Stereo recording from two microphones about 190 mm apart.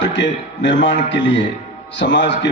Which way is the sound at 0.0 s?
70° left (ahead or behind).